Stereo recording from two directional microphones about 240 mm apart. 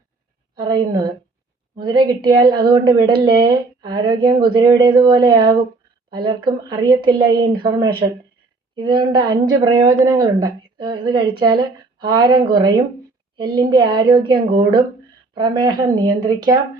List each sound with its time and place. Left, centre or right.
1.8 s a woman's voice: centre